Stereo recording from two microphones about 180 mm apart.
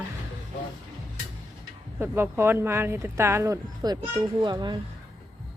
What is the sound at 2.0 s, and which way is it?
A child's voice, 10° right (ahead or behind).